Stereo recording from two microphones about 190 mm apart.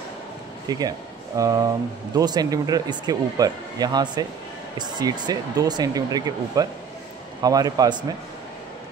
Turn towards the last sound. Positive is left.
turn(degrees=-20)  # may be behind; listen again after turning